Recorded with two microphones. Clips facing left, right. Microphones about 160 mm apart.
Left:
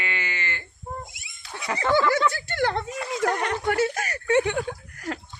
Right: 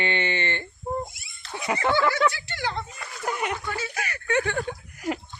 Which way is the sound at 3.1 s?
90° left.